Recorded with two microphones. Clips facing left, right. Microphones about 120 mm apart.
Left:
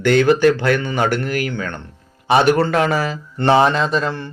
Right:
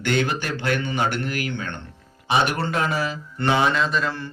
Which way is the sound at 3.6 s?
35° left (ahead or behind).